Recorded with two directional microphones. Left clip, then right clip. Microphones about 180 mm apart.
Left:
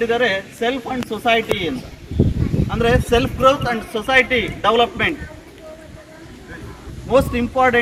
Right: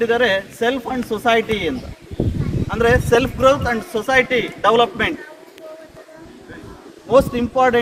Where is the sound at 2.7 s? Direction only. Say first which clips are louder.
Right 2 dB; 15° right (ahead or behind).